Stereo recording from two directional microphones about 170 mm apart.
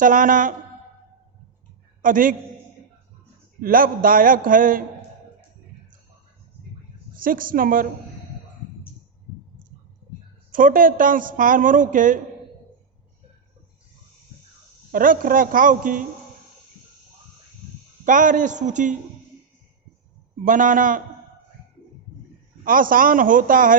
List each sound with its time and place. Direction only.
0.0 s a man's voice: 50° right (ahead or behind)
2.0 s a man's voice: 50° right (ahead or behind)
3.6 s a man's voice: 55° right (ahead or behind)
7.2 s a man's voice: 55° right (ahead or behind)
10.5 s a man's voice: 55° right (ahead or behind)
14.9 s a man's voice: 55° right (ahead or behind)
18.0 s a man's voice: 50° right (ahead or behind)
20.4 s a man's voice: 50° right (ahead or behind)
22.6 s a man's voice: 55° right (ahead or behind)